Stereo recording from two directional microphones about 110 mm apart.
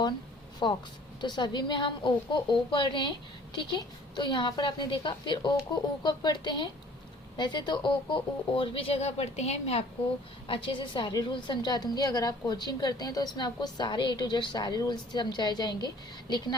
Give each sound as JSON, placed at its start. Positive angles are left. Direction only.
{"t": 0.6, "sound": "a woman's voice", "side_deg": 45}
{"t": 10.5, "sound": "a woman's voice", "side_deg": 50}